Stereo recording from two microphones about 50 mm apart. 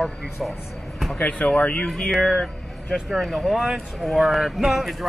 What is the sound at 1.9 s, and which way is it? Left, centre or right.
Speech, centre.